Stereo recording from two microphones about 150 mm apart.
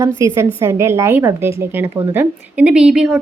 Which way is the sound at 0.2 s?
20° right (ahead or behind).